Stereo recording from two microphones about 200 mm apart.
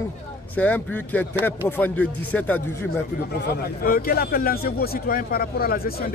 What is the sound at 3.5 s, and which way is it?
Speech, 45° left (ahead or behind).